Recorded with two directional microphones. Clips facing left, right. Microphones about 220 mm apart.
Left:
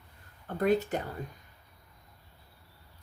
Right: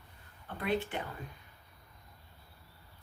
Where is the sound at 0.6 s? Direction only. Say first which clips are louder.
Left 7 dB; 40° left (ahead or behind).